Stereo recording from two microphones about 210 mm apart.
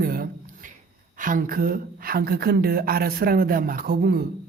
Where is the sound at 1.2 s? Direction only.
40° right (ahead or behind).